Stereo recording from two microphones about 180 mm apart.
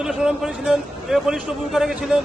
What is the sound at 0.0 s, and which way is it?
Speech, 5° right (ahead or behind).